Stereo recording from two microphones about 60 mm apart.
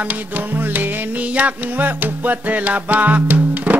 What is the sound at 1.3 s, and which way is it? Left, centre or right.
Music, right.